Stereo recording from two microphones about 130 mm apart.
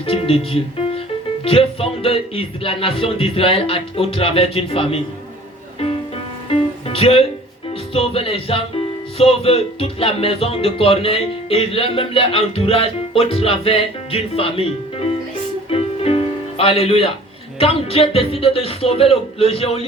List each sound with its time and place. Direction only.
0.0 s speech: 45° left (ahead or behind)
6.8 s speech: 50° left (ahead or behind)
15.7 s music: 45° left (ahead or behind)
17.6 s speech: 45° left (ahead or behind)